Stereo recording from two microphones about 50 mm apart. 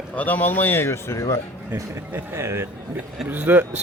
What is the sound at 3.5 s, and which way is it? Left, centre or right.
Speech, right.